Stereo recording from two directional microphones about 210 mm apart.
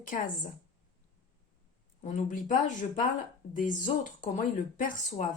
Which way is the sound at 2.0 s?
35° left (ahead or behind).